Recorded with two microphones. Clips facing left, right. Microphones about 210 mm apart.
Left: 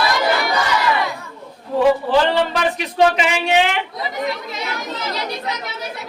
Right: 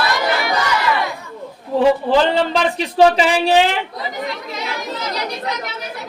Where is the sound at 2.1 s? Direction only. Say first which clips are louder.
Right 1 dB; 30° right (ahead or behind).